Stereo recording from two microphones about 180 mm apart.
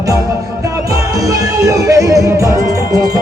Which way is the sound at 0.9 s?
20° right (ahead or behind).